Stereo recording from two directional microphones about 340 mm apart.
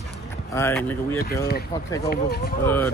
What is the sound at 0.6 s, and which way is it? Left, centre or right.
Speech, centre.